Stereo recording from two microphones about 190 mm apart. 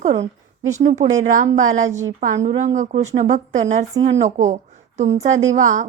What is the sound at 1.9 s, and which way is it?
Speech, 15° right (ahead or behind).